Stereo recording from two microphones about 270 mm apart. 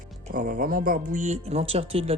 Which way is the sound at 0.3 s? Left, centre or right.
Right.